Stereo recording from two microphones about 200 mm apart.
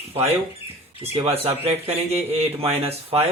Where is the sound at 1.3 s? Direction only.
30° right (ahead or behind).